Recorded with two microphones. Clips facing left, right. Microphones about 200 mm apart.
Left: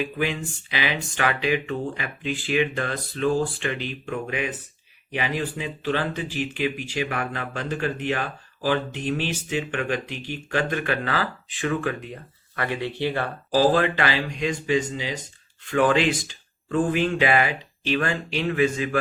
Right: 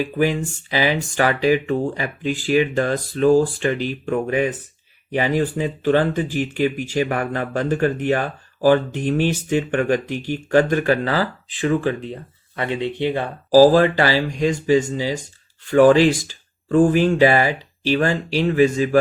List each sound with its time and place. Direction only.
0.0 s speech: 40° right (ahead or behind); by 13.3 s 20° right (ahead or behind)
13.5 s speech: 35° right (ahead or behind)